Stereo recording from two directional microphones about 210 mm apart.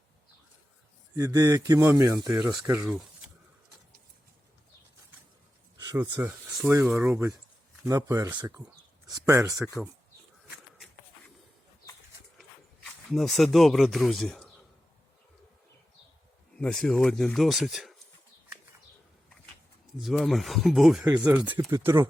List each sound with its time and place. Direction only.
1.1 s speech: 15° right (ahead or behind)
5.7 s speech: 20° right (ahead or behind)
9.6 s speech: 15° left (ahead or behind)
12.4 s speech: centre (ahead or behind)
16.6 s speech: 5° left (ahead or behind)
20.0 s speech: centre (ahead or behind)